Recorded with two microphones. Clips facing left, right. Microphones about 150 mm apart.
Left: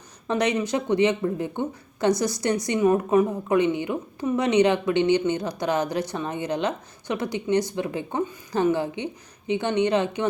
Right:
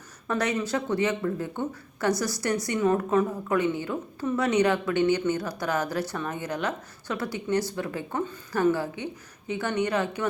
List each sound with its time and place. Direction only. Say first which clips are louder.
0.3 s speech: left 4 dB; 20° left (ahead or behind)